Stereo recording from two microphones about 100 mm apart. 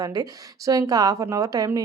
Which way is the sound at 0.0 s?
40° right (ahead or behind).